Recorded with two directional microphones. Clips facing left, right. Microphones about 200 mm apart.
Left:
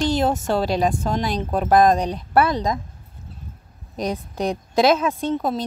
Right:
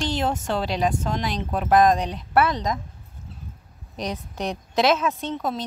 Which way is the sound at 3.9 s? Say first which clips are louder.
Left 5 dB; 35° left (ahead or behind).